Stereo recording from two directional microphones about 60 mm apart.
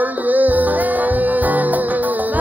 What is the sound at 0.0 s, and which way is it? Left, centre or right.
Music, right.